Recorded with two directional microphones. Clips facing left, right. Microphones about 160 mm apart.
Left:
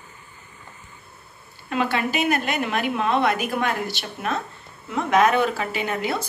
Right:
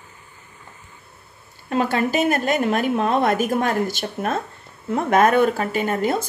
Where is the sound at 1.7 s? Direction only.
40° right (ahead or behind).